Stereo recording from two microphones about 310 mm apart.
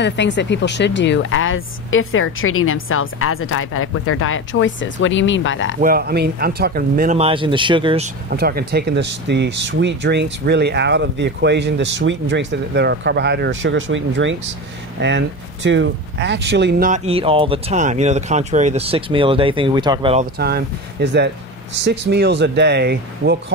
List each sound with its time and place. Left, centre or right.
0.0 s speech: left
5.8 s speech: right
8.3 s speech: right
20.3 s speech: right